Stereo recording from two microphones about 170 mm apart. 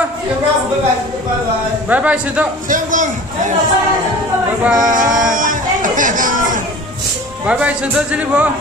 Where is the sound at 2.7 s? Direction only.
50° right (ahead or behind).